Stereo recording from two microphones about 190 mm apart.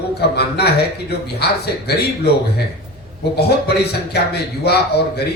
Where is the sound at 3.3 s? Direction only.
60° left (ahead or behind).